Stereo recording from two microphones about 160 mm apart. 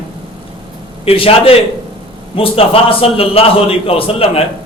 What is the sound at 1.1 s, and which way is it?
A man's voice, 35° left (ahead or behind).